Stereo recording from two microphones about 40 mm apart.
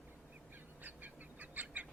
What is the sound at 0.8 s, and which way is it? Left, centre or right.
Bird, right.